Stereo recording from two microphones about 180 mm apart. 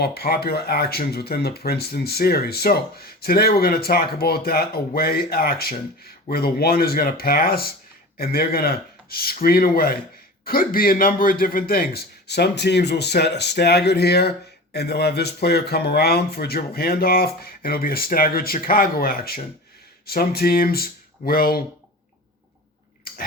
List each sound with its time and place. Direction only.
0.0 s a man's voice: 60° left (ahead or behind)